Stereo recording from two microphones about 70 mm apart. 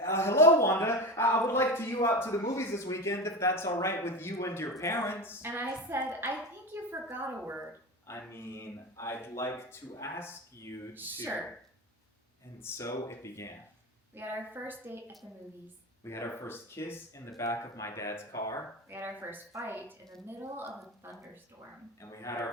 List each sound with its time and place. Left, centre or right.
0.0 s a sound: left
2.3 s speech: left
5.4 s a woman's voice: right
5.6 s a woman's voice: right
6.1 s a woman's voice: right
8.0 s speech: left
10.9 s speech: right
12.6 s speech: left
14.2 s a woman's voice: right
16.0 s speech: left
17.3 s speech: left
18.3 s speech: left
18.9 s a woman's voice: right
22.0 s speech: left